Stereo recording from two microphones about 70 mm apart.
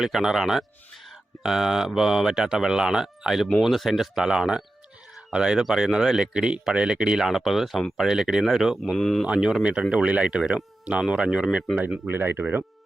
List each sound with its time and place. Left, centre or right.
0.0 s speech: centre
9.2 s speech: centre
12.0 s speech: right